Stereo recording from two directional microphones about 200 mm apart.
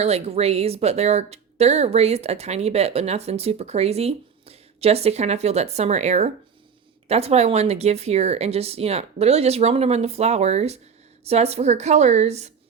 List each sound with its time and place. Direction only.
0.0 s speech: 30° right (ahead or behind)